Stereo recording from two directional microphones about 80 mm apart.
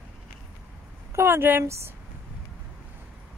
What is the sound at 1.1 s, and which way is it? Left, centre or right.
Speech, right.